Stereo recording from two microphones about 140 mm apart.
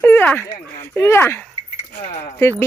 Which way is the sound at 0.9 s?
15° left (ahead or behind).